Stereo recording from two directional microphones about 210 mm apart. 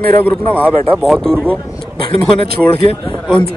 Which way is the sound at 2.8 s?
25° left (ahead or behind).